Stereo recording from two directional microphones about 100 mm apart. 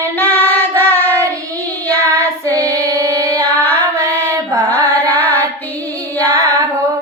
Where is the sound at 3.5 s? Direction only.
20° left (ahead or behind).